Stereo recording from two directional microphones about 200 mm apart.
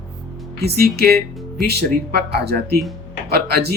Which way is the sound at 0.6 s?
50° right (ahead or behind).